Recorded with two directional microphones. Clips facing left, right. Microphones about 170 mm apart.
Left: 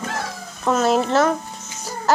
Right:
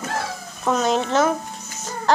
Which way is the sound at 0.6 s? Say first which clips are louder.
Left 2 dB; 5° left (ahead or behind).